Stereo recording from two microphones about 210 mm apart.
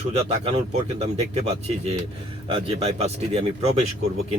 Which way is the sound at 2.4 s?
25° right (ahead or behind).